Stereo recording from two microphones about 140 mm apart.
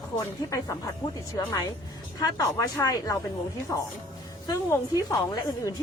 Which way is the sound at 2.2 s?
25° left (ahead or behind).